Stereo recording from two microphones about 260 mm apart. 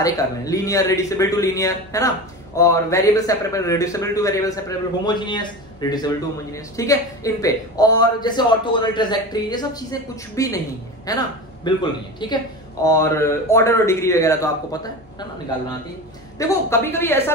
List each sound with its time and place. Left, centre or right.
0.0 s speech: centre
16.3 s speech: centre